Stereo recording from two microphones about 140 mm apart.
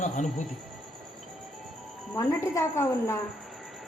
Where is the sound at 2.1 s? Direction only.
20° left (ahead or behind).